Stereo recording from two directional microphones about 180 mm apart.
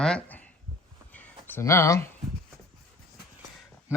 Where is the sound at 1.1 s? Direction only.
10° left (ahead or behind).